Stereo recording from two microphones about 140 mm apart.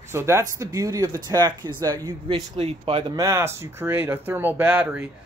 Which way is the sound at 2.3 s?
45° right (ahead or behind).